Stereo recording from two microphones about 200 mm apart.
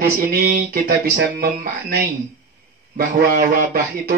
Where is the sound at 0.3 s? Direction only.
45° right (ahead or behind).